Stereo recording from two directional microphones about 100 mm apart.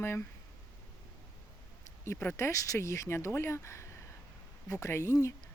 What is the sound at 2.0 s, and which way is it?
Speech, 25° left (ahead or behind).